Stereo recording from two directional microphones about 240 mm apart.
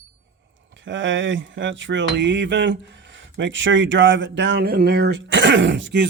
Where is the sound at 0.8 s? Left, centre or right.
Right.